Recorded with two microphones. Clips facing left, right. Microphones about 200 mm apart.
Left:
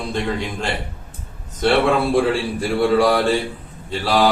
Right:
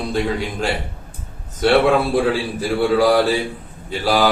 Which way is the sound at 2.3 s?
Centre (ahead or behind).